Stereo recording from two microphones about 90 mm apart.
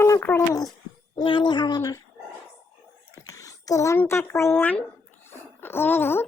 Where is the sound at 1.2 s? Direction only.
70° left (ahead or behind); by 2.0 s 45° left (ahead or behind).